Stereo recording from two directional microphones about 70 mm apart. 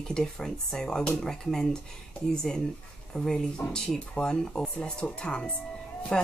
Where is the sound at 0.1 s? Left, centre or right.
Centre.